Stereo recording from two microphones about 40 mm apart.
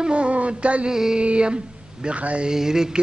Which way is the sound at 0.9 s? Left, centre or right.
Centre.